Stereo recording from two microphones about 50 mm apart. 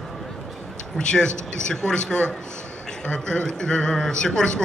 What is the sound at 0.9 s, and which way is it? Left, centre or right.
A man's voice, centre.